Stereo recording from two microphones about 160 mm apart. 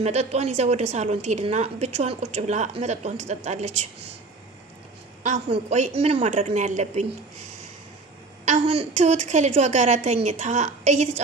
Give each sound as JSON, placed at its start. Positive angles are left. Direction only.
{"t": 0.0, "sound": "a woman's voice", "side_deg": -45}
{"t": 5.6, "sound": "a woman's voice", "side_deg": -45}
{"t": 8.4, "sound": "a woman's voice", "side_deg": -50}